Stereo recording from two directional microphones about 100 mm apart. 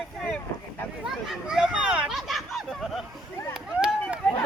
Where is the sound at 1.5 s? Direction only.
5° right (ahead or behind).